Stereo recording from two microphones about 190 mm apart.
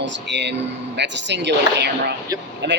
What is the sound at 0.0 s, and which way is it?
Speech, 70° right (ahead or behind).